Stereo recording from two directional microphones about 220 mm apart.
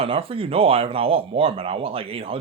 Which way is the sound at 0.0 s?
25° right (ahead or behind).